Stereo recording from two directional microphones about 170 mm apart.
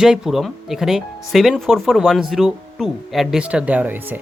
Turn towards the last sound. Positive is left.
turn(degrees=-10)  # may be behind; listen again after turning